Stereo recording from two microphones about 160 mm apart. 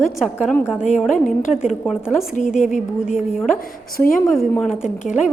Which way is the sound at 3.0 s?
5° right (ahead or behind).